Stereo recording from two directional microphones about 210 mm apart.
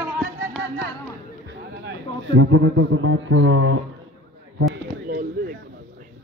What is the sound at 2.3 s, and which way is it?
A man's voice, 70° right (ahead or behind).